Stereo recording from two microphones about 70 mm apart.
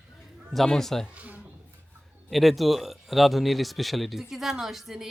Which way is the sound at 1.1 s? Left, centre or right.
Right.